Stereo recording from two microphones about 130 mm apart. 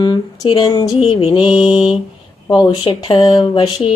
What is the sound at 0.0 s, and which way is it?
Speech, 35° left (ahead or behind).